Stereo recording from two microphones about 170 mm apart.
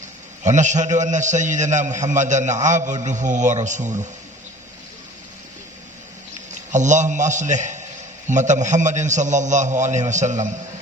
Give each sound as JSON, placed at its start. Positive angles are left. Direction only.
{"t": 0.4, "sound": "a man's voice", "side_deg": -45}
{"t": 6.5, "sound": "a man's voice", "side_deg": -45}